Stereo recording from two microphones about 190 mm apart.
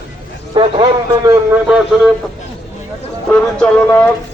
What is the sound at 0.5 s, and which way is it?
Speech, 25° right (ahead or behind).